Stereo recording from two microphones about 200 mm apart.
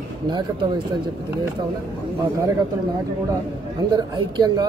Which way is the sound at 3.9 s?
20° right (ahead or behind).